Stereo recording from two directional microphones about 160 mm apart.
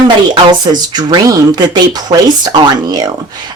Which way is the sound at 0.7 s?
25° right (ahead or behind).